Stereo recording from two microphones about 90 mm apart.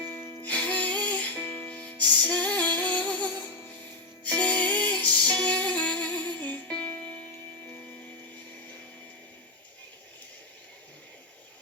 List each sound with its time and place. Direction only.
0.0 s music: 25° left (ahead or behind)
0.4 s music: 15° left (ahead or behind)